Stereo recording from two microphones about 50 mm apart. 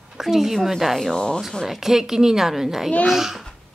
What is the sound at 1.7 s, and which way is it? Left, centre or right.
A woman's voice, centre.